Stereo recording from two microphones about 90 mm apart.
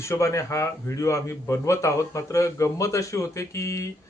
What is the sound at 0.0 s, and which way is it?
Speech, 35° left (ahead or behind).